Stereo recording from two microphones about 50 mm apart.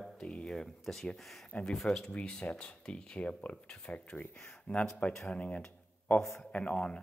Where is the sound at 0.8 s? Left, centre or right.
Centre.